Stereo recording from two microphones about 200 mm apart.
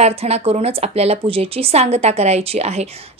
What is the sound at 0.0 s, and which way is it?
A woman's voice, 30° right (ahead or behind).